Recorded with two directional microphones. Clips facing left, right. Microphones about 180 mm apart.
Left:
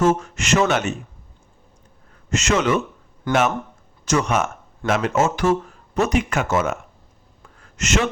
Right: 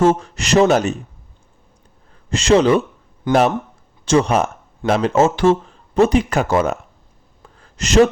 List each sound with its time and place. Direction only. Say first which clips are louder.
0.0 s speech: right 3 dB; 30° right (ahead or behind)
2.3 s speech: right 6 dB; 30° right (ahead or behind)
3.3 s speech: right 4 dB; 20° right (ahead or behind)
4.0 s speech: right 5 dB; 30° right (ahead or behind)
7.6 s a sound: right 9 dB; 35° right (ahead or behind)